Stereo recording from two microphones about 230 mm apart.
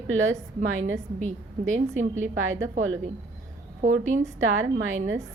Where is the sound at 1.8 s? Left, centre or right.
Right.